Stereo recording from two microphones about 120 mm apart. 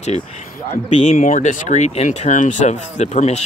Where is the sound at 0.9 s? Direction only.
80° left.